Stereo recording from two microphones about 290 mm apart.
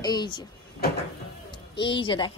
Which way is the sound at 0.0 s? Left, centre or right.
Centre.